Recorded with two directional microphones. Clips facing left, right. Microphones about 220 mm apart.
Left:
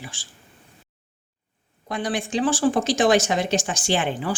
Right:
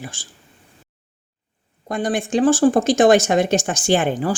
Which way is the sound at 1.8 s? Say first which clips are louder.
Right 5 dB; 45° right (ahead or behind).